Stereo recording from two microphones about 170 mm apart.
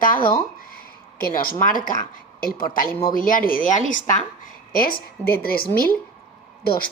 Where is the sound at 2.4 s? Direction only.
60° left (ahead or behind).